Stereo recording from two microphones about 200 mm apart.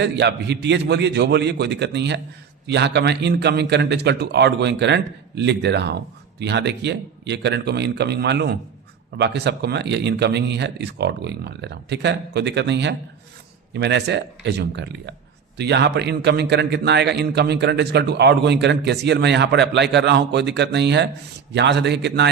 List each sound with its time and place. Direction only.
0.0 s speech: 55° right (ahead or behind)